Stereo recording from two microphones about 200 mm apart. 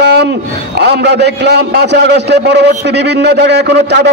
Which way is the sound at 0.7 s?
55° right (ahead or behind).